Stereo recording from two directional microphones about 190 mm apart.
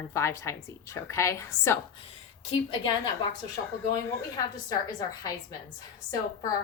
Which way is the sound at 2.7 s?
25° left (ahead or behind).